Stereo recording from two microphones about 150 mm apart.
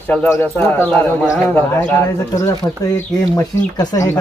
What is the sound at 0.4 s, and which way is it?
A man's voice, 10° left (ahead or behind).